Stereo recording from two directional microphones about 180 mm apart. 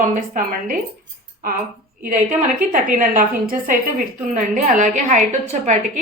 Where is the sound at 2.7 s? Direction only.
50° right (ahead or behind).